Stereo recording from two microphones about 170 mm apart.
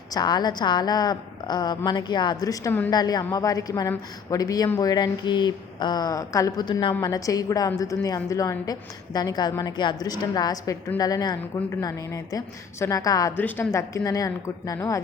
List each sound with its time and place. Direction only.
0.1 s a woman's voice: 25° left (ahead or behind)